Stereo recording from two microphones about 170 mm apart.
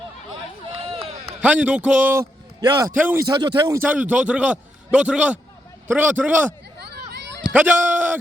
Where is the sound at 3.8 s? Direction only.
10° right (ahead or behind).